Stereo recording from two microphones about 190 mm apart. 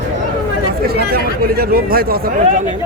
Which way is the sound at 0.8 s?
55° right (ahead or behind).